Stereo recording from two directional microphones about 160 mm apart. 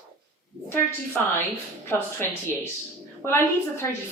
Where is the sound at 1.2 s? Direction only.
10° left (ahead or behind).